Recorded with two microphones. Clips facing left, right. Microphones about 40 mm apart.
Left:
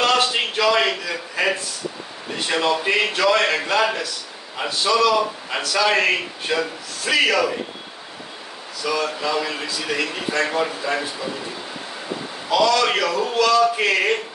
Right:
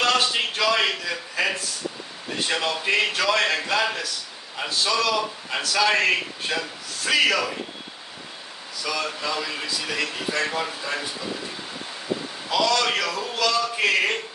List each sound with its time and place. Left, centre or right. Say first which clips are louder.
0.0 s a sound: left 3 dB; centre
1.0 s a man's voice: left 3 dB; centre
8.8 s a man's voice: left 5 dB; centre
12.4 s a man's voice: left 4 dB; centre